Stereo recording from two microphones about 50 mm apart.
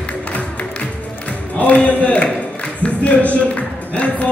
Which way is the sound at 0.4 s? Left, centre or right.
Left.